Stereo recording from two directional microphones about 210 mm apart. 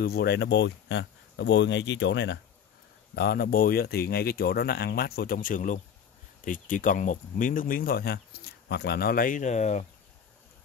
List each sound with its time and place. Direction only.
0.0 s speech: 50° left (ahead or behind); by 9.8 s 35° left (ahead or behind)